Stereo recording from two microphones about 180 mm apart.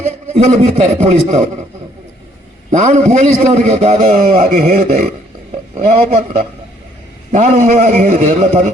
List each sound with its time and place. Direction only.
0.3 s a man's voice: 35° right (ahead or behind)
2.7 s a man's voice: 40° right (ahead or behind)
7.3 s a man's voice: 40° right (ahead or behind)